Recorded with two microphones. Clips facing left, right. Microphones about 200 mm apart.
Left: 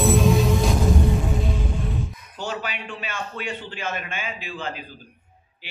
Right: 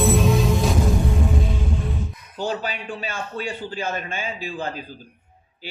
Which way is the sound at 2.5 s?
35° right (ahead or behind).